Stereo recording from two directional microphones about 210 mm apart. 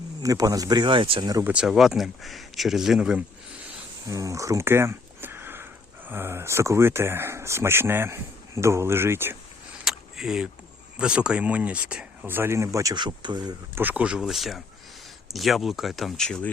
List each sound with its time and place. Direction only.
0.2 s speech: 15° right (ahead or behind)
1.5 s speech: centre (ahead or behind)
4.0 s a sound: 15° right (ahead or behind)
6.1 s speech: 10° right (ahead or behind)
9.8 s vehicle: centre (ahead or behind)
10.9 s speech: 5° right (ahead or behind); by 13.8 s 20° right (ahead or behind)
13.8 s speech: 5° right (ahead or behind)